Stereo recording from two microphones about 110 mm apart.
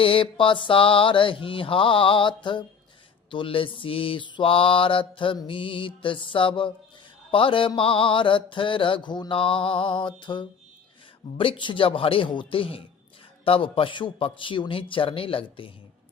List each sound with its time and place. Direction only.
0.0 s mantra: 55° left (ahead or behind)
7.3 s a man's voice: 55° left (ahead or behind)
7.8 s mantra: 55° left (ahead or behind)